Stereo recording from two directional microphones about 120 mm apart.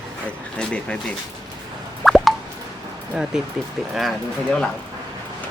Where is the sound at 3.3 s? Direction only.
5° right (ahead or behind).